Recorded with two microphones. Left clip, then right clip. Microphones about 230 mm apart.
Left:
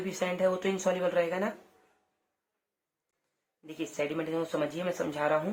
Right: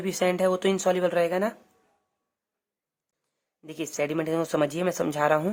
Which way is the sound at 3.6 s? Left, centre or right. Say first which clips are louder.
Right 4 dB; right.